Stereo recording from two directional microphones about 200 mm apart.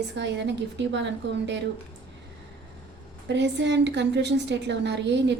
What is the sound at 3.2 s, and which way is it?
A woman's voice, 60° right (ahead or behind).